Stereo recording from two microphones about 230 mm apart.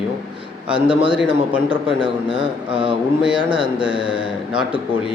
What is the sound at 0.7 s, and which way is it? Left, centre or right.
A man's voice, right.